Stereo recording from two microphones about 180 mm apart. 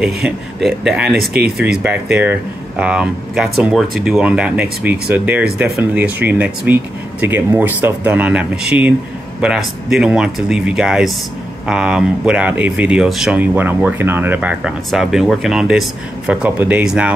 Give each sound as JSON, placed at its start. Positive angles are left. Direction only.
{"t": 0.0, "sound": "speech", "side_deg": 0}